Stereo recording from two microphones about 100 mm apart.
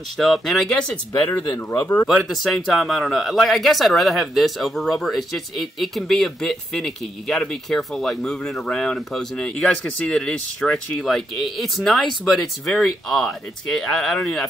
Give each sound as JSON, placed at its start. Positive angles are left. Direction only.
{"t": 0.2, "sound": "speech", "side_deg": 0}
{"t": 1.7, "sound": "speech", "side_deg": 25}
{"t": 2.2, "sound": "speech", "side_deg": 0}